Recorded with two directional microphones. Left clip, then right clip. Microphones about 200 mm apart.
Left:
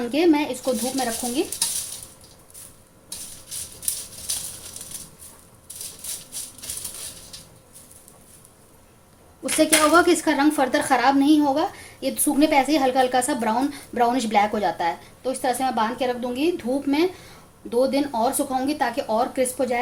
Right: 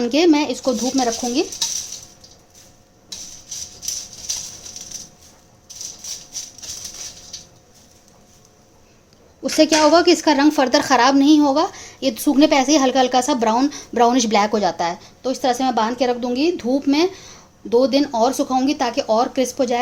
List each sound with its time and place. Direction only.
0.0 s speech: 45° right (ahead or behind)
9.4 s speech: 30° right (ahead or behind)